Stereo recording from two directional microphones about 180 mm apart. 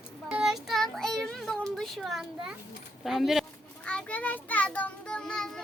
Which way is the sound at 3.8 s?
5° left (ahead or behind).